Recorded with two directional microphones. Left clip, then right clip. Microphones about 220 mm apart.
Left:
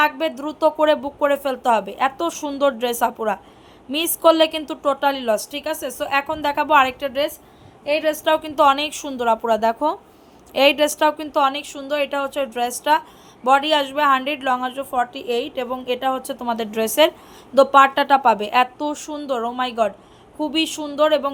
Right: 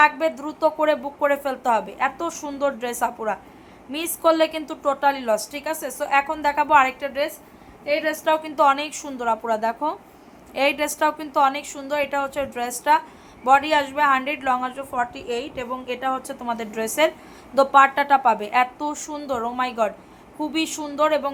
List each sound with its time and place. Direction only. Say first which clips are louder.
0.0 s a woman's voice: right 1 dB; 25° left (ahead or behind)